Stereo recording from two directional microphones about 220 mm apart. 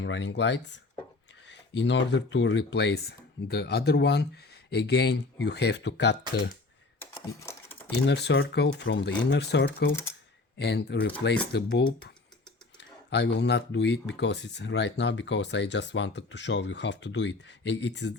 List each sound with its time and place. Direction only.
0.0 s speech: 60° left (ahead or behind)
7.0 s typewriter: 10° left (ahead or behind)
8.0 s speech: 50° left (ahead or behind)
9.9 s speech: 10° left (ahead or behind)
10.6 s speech: 50° left (ahead or behind)